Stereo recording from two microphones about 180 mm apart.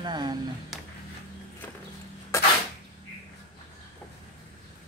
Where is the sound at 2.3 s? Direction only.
15° left (ahead or behind).